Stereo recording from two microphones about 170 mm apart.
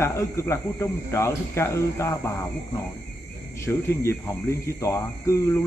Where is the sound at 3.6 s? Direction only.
15° left (ahead or behind).